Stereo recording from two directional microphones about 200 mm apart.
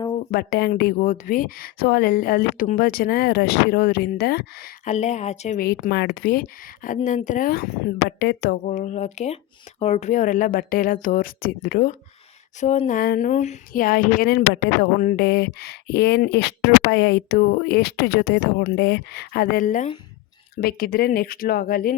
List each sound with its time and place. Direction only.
0.3 s speech: 50° left (ahead or behind)
4.9 s a woman's voice: 35° left (ahead or behind)
5.5 s speech: 50° left (ahead or behind)
8.6 s a woman's voice: 35° left (ahead or behind)
12.5 s a woman's voice: 35° left (ahead or behind)